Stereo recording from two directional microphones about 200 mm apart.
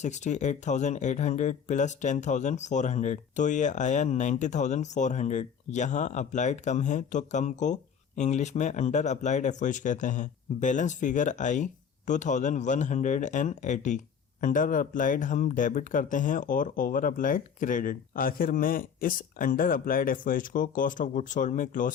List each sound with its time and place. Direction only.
0.0 s speech: 35° left (ahead or behind)